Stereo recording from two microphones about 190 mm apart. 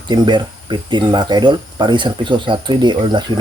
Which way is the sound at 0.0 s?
20° right (ahead or behind).